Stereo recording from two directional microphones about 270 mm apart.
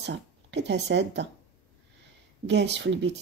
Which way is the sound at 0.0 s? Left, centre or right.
Right.